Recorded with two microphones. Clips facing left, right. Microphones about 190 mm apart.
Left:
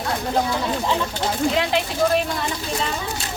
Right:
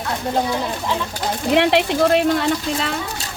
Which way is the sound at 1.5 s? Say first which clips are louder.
Right 6 dB; 70° right (ahead or behind).